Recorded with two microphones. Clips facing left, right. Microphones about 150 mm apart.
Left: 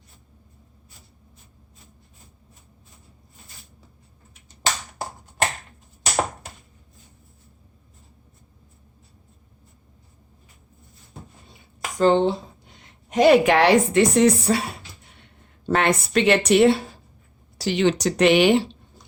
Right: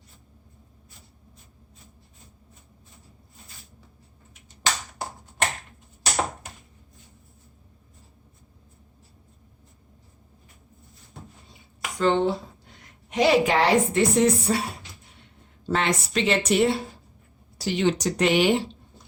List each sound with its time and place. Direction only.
11.8 s a sound: 35° left (ahead or behind)
13.1 s speech: 50° left (ahead or behind); by 14.6 s 75° left (ahead or behind)
15.2 s speech: 60° left (ahead or behind)
17.6 s speech: 85° left